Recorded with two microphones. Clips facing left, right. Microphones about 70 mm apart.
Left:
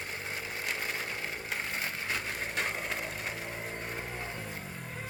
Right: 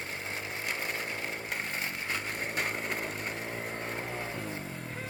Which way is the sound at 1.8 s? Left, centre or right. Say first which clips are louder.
Even; right.